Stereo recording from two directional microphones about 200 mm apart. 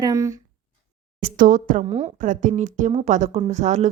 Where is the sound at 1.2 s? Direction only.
45° right (ahead or behind).